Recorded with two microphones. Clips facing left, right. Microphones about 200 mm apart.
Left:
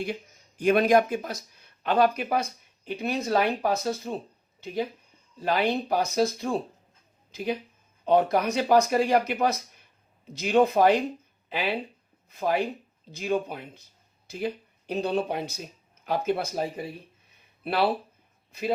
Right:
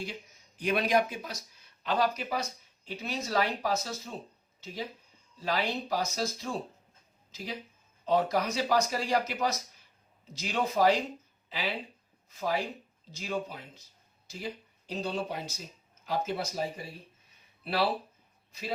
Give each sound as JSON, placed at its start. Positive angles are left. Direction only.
{"t": 0.0, "sound": "speech", "side_deg": 55}